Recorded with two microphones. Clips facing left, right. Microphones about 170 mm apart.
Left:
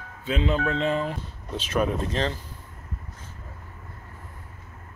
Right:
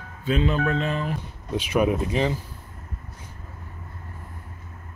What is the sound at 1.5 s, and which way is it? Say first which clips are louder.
Speech: right 3 dB; 10° right (ahead or behind).